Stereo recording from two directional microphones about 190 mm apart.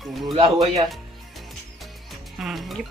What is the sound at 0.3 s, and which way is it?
Speech, 30° right (ahead or behind).